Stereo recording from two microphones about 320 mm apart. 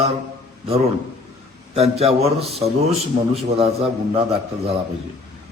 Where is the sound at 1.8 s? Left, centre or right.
Centre.